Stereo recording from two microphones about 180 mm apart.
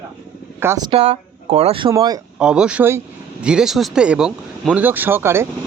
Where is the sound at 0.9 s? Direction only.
35° right (ahead or behind).